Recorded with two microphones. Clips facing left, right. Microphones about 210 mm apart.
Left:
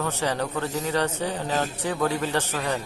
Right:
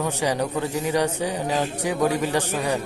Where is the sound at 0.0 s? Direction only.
15° right (ahead or behind).